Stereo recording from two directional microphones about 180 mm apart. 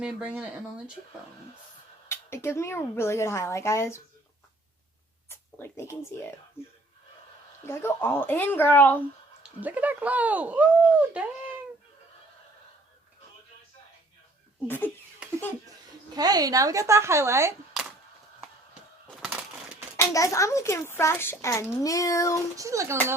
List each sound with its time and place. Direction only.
0.0 s speech: 5° right (ahead or behind)
2.0 s a child's voice: 15° left (ahead or behind)
5.3 s speech: 15° left (ahead or behind)
7.6 s a child's voice: 15° left (ahead or behind)
9.6 s speech: 10° right (ahead or behind)
16.1 s speech: 20° right (ahead or behind)
19.2 s a sound: 5° right (ahead or behind)
20.0 s a child's voice: 15° left (ahead or behind)
22.5 s speech: 20° right (ahead or behind)